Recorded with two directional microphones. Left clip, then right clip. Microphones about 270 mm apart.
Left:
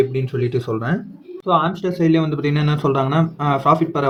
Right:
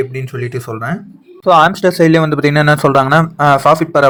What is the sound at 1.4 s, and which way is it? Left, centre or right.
Speech, right.